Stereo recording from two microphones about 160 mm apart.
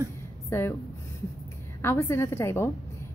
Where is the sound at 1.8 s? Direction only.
15° left (ahead or behind).